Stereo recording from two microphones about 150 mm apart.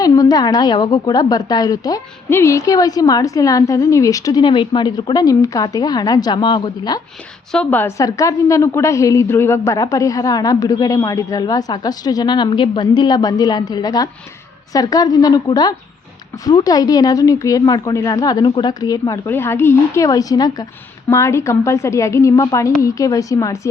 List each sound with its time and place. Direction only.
0.0 s a woman's voice: 25° left (ahead or behind)
7.5 s a woman's voice: 10° left (ahead or behind)